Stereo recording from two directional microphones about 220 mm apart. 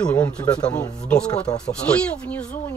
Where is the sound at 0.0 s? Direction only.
5° left (ahead or behind).